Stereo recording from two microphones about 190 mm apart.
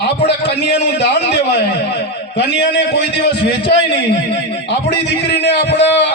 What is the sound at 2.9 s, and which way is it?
A man's voice, 65° left (ahead or behind).